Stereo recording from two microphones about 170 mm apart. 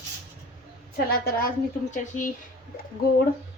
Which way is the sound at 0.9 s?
60° left (ahead or behind).